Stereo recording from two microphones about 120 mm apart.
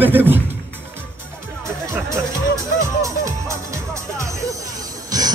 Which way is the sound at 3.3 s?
25° right (ahead or behind).